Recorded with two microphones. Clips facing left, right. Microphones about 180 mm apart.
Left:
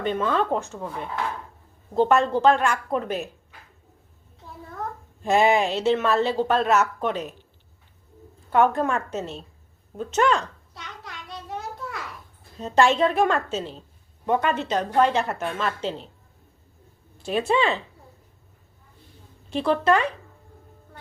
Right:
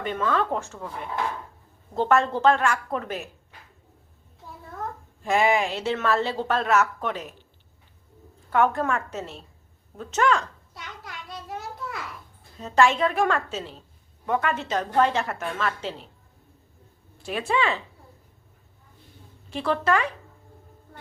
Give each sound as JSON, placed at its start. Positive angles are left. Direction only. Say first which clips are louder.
{"t": 0.0, "sound": "speech", "louder": "left 2 dB", "side_deg": 25}
{"t": 2.0, "sound": "a woman's voice", "louder": "left 2 dB", "side_deg": 15}
{"t": 5.2, "sound": "speech", "louder": "left 3 dB", "side_deg": 25}
{"t": 8.5, "sound": "speech", "louder": "left 2 dB", "side_deg": 20}
{"t": 10.8, "sound": "a sound", "louder": "even", "side_deg": 0}
{"t": 12.6, "sound": "speech", "louder": "left 2 dB", "side_deg": 25}
{"t": 17.2, "sound": "speech", "louder": "left 3 dB", "side_deg": 25}
{"t": 19.5, "sound": "speech", "louder": "left 3 dB", "side_deg": 20}